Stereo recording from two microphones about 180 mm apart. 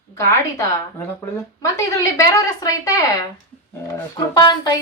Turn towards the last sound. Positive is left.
turn(degrees=20)  # may be behind; listen again after turning